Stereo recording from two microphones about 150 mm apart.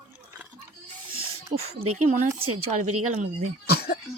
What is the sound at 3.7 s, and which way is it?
Speech, 90° left.